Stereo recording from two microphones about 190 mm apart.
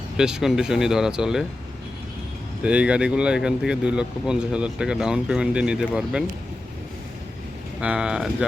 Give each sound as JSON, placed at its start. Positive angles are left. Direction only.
{"t": 0.2, "sound": "speech", "side_deg": -5}
{"t": 2.6, "sound": "speech", "side_deg": -5}
{"t": 7.8, "sound": "speech", "side_deg": -5}